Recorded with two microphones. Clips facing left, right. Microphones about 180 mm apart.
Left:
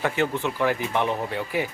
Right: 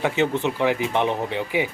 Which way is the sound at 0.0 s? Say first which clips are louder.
Right 3 dB; 20° right (ahead or behind).